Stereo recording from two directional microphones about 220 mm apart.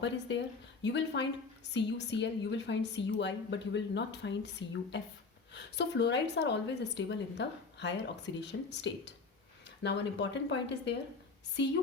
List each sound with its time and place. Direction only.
0.0 s a woman's voice: 55° left (ahead or behind)